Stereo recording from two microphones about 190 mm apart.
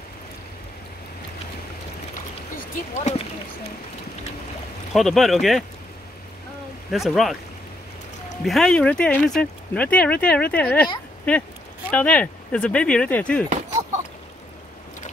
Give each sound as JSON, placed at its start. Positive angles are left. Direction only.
{"t": 2.5, "sound": "speech", "side_deg": 35}
{"t": 4.9, "sound": "speech", "side_deg": 0}
{"t": 6.9, "sound": "speech", "side_deg": 0}
{"t": 8.5, "sound": "speech", "side_deg": 5}